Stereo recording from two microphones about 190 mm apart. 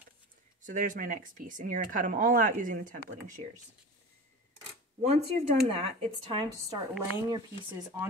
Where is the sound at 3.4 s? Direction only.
30° right (ahead or behind).